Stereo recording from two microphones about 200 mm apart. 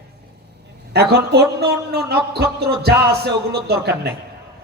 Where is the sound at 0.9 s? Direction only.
55° right (ahead or behind).